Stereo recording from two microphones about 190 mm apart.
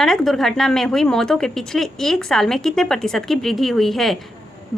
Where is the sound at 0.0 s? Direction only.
Centre (ahead or behind).